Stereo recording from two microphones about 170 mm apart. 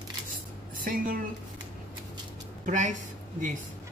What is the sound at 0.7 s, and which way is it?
Speech, 55° right (ahead or behind).